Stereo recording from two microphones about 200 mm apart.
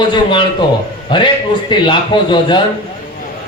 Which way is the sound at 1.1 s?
25° left (ahead or behind).